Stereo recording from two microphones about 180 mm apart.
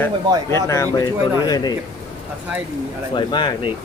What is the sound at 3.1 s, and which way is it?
Speech, 25° left (ahead or behind).